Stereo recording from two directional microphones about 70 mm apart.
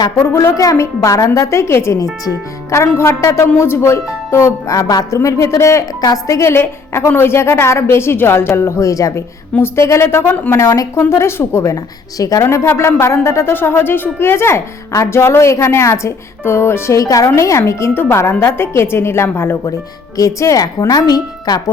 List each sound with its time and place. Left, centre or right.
0.3 s speech: left
4.7 s a woman's voice: left
5.1 s speech: left
6.0 s a woman's voice: left
6.4 s speech: left
9.6 s speech: left
10.5 s speech: left
11.1 s speech: left
11.7 s speech: left
13.5 s speech: left
17.0 s speech: left
20.1 s a woman's voice: left